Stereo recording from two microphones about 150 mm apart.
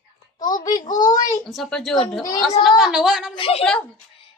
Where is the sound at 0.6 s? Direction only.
25° left (ahead or behind).